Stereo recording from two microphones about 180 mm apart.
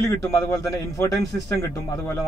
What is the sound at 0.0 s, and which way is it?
A man's voice, 15° left (ahead or behind).